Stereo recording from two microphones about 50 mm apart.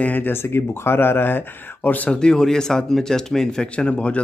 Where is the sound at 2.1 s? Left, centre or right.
Centre.